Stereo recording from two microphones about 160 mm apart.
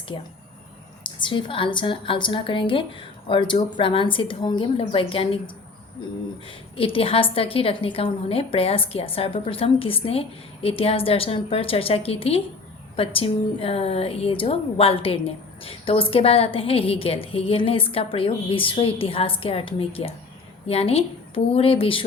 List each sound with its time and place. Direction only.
1.0 s a woman's voice: 30° left (ahead or behind)
6.5 s a woman's voice: 35° left (ahead or behind)